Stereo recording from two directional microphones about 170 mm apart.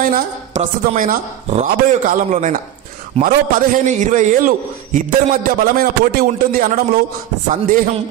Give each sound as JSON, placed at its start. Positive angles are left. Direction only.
{"t": 0.0, "sound": "a man's voice", "side_deg": -50}